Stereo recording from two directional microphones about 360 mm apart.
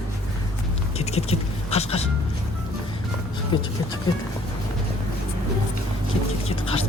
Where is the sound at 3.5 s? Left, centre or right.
Centre.